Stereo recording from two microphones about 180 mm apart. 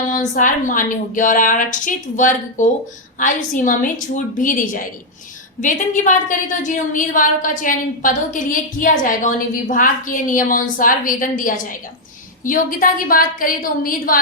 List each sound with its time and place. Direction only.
0.1 s a woman's voice: 45° left (ahead or behind)